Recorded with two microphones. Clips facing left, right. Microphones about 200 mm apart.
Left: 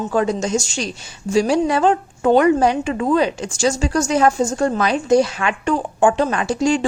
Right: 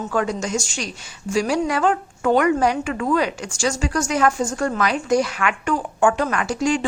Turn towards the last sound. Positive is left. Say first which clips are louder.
# left 3 dB
turn(degrees=25)  # may be behind; listen again after turning